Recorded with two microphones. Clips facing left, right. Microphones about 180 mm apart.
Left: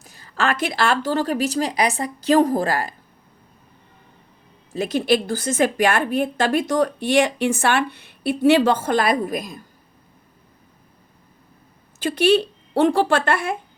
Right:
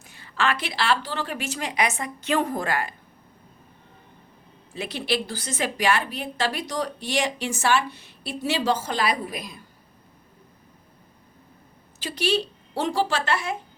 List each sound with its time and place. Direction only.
0.0 s a woman's voice: 40° left (ahead or behind)
4.7 s a woman's voice: 45° left (ahead or behind)
11.9 s speech: 55° left (ahead or behind)